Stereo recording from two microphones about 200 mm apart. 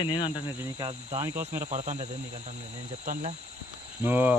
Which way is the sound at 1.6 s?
35° right (ahead or behind).